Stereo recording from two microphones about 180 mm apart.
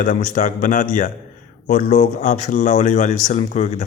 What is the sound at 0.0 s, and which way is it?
Speech, 45° left (ahead or behind).